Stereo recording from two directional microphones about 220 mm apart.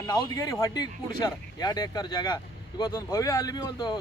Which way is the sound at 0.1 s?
15° left (ahead or behind).